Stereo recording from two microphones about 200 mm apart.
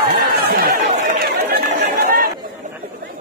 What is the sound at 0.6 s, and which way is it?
Chatter, 45° right (ahead or behind).